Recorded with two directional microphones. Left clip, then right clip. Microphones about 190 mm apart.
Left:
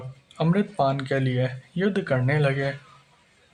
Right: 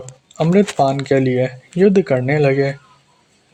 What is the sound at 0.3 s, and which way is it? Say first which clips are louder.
Speech: right 10 dB; 45° right (ahead or behind).